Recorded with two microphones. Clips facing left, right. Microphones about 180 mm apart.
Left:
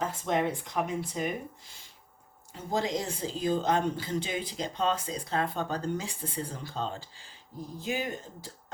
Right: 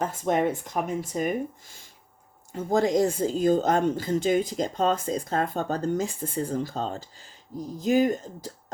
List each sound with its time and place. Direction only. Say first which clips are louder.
0.0 s speech: right 4 dB; 50° right (ahead or behind)